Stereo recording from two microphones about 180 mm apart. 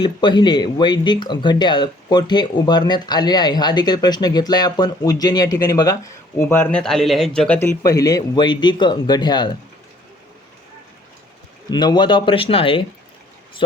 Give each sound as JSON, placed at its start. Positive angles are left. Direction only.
{"t": 0.0, "sound": "speech", "side_deg": 25}
{"t": 7.8, "sound": "speech", "side_deg": 20}
{"t": 11.7, "sound": "speech", "side_deg": 25}